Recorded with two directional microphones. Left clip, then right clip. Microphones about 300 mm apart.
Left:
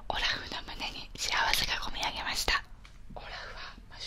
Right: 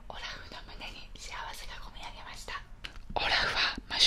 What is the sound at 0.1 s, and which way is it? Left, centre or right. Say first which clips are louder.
Speech: left 10 dB; left.